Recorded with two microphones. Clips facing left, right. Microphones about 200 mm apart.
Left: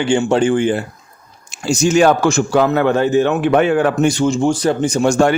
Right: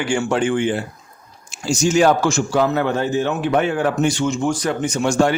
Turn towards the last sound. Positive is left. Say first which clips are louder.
# left 4 dB
turn(degrees=45)  # may be behind; listen again after turning